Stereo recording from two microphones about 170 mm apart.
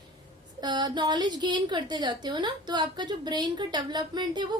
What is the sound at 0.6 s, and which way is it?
Speech, 25° right (ahead or behind).